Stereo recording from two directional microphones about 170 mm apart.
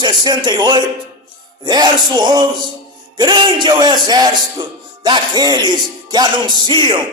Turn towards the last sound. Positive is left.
turn(degrees=-25)  # may be behind; listen again after turning